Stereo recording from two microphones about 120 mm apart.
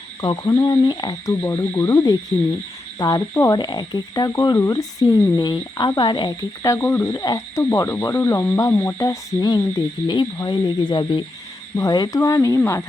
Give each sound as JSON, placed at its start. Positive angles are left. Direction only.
{"t": 0.2, "sound": "speech", "side_deg": 35}
{"t": 7.1, "sound": "speech", "side_deg": 30}